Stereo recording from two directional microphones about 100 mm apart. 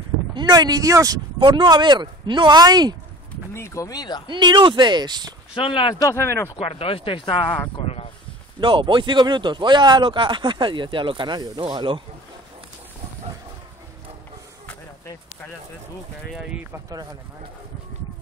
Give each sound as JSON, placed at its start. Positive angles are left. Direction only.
{"t": 0.3, "sound": "speech", "side_deg": -45}
{"t": 1.4, "sound": "speech", "side_deg": -50}
{"t": 3.5, "sound": "speech", "side_deg": 30}
{"t": 4.3, "sound": "speech", "side_deg": -50}
{"t": 5.5, "sound": "speech", "side_deg": 60}
{"t": 5.9, "sound": "speech", "side_deg": 25}
{"t": 6.6, "sound": "speech", "side_deg": 75}
{"t": 7.7, "sound": "a sound", "side_deg": 90}
{"t": 8.5, "sound": "speech", "side_deg": -55}
{"t": 16.3, "sound": "speech", "side_deg": -10}
{"t": 16.9, "sound": "speech", "side_deg": -40}